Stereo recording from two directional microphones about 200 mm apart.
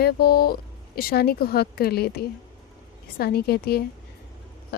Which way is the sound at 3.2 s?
50° left (ahead or behind).